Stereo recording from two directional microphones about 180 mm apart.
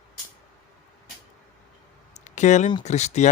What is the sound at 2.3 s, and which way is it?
A man's voice, 40° left (ahead or behind).